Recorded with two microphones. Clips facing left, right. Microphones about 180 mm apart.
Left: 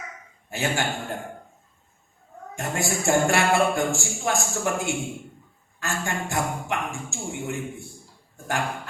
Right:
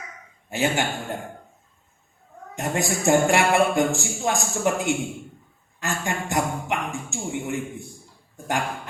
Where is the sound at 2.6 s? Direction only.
20° right (ahead or behind).